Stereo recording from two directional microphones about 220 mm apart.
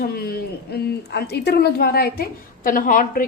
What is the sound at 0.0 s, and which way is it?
A woman's voice, 45° left (ahead or behind).